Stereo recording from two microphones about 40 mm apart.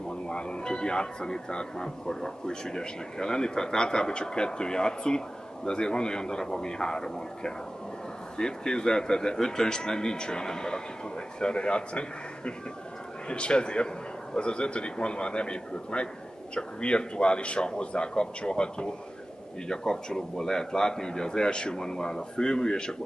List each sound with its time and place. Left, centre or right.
0.3 s speech: left